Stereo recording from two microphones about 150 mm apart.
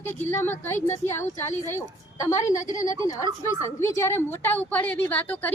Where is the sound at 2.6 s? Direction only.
20° left (ahead or behind).